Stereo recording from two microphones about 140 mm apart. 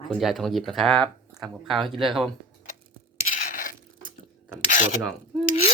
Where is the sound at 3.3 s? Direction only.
75° left (ahead or behind).